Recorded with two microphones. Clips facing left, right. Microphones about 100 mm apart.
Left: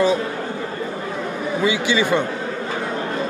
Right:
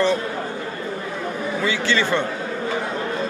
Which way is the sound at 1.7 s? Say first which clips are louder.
Left 3 dB; 15° left (ahead or behind).